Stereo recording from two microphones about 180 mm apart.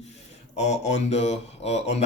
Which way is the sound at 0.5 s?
40° left (ahead or behind).